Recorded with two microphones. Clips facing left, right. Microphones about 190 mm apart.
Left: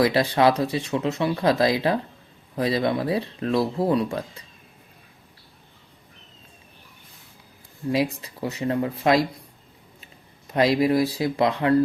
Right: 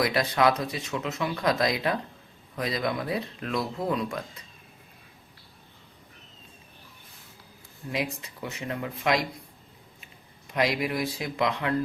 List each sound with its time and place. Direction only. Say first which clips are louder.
0.0 s speech: left 5 dB; 30° left (ahead or behind)
7.9 s speech: left 6 dB; 35° left (ahead or behind)
10.4 s speech: left 7 dB; 35° left (ahead or behind)